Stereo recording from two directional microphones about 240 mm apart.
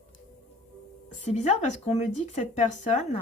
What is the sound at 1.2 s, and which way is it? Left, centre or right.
Speech, left.